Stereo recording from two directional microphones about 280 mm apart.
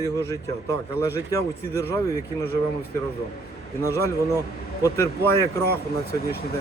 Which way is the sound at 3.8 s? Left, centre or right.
Centre.